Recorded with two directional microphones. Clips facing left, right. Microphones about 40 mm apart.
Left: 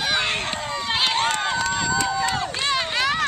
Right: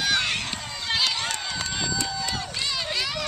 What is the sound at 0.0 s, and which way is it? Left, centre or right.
Run, left.